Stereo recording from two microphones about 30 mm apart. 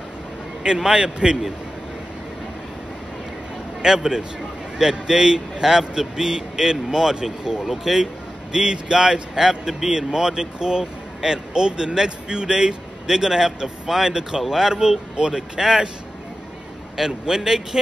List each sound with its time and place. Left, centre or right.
0.7 s speech: right
3.8 s speech: right
7.6 s a man's voice: centre
8.0 s a man's voice: right
15.1 s speech: right
16.9 s a man's voice: centre